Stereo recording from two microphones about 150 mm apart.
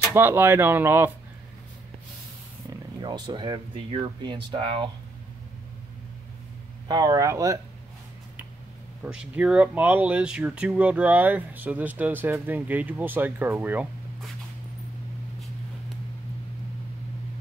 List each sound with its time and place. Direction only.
0.1 s speech: 15° right (ahead or behind)
3.0 s speech: 30° right (ahead or behind)
6.9 s speech: 25° right (ahead or behind)
9.0 s speech: 5° right (ahead or behind)